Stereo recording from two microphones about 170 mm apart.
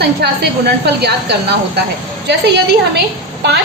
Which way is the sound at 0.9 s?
75° right (ahead or behind).